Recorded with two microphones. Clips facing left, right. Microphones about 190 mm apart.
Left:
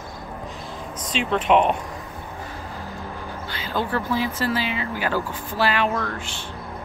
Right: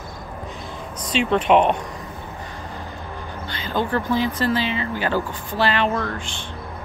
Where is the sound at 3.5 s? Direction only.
5° left (ahead or behind).